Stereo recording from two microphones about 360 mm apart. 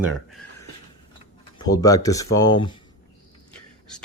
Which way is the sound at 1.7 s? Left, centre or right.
Centre.